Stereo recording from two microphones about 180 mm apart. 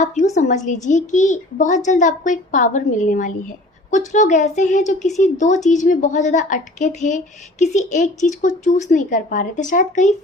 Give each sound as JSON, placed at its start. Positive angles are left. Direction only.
{"t": 0.3, "sound": "a woman's voice", "side_deg": 40}